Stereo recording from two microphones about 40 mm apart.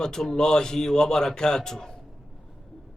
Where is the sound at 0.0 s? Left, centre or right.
Centre.